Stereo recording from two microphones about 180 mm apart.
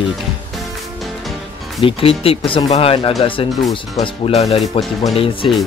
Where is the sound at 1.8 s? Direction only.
30° left (ahead or behind).